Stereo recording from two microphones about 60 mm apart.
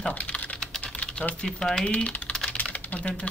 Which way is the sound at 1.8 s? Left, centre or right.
Left.